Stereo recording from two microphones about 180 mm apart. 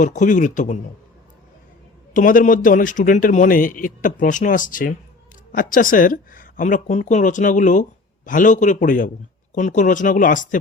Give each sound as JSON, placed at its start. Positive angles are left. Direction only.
{"t": 0.0, "sound": "a woman's voice", "side_deg": 45}
{"t": 2.1, "sound": "a woman's voice", "side_deg": 50}